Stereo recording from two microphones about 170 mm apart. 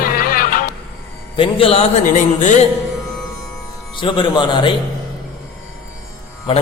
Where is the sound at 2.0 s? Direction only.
50° left (ahead or behind).